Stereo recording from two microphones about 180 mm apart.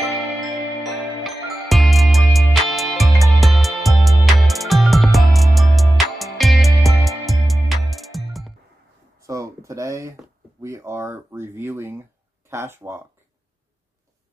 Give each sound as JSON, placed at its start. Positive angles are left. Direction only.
{"t": 0.8, "sound": "music", "side_deg": 0}
{"t": 9.2, "sound": "a sound", "side_deg": -15}
{"t": 10.6, "sound": "speech", "side_deg": -15}